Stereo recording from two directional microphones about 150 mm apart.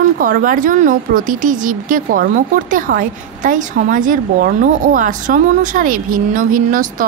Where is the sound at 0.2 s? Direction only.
70° right (ahead or behind).